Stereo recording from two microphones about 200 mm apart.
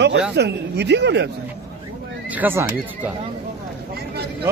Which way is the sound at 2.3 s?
10° right (ahead or behind).